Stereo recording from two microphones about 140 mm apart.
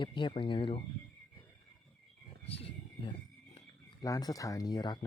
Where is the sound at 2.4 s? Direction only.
45° left (ahead or behind).